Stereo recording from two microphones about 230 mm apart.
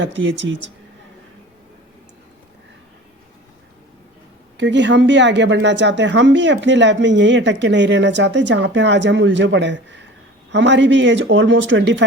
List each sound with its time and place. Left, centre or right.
0.0 s speech: right
4.5 s speech: right